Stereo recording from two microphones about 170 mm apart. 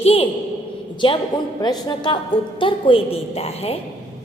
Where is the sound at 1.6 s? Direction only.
25° left (ahead or behind).